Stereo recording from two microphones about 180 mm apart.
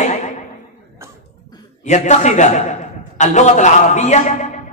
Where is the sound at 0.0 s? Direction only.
40° left (ahead or behind).